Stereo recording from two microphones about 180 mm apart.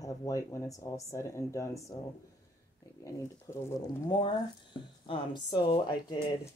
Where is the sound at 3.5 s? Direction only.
20° left (ahead or behind).